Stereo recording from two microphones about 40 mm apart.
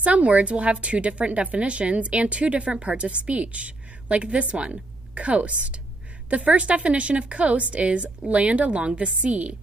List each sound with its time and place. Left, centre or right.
0.0 s a woman's voice: right